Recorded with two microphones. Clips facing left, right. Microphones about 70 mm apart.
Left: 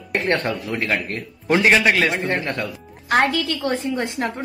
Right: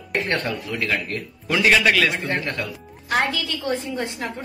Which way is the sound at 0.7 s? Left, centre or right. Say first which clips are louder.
Left 2 dB; left.